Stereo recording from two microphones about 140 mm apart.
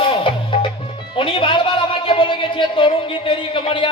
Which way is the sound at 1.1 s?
40° left (ahead or behind).